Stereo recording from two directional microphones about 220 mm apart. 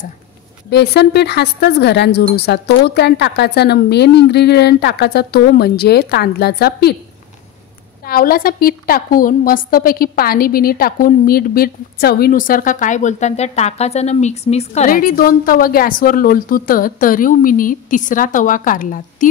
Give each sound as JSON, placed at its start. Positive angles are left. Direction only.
{"t": 0.7, "sound": "a woman's voice", "side_deg": 50}
{"t": 8.0, "sound": "a woman's voice", "side_deg": 40}